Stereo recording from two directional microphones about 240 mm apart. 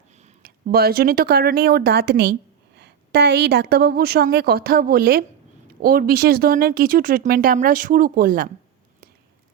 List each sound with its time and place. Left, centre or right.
0.4 s speech: right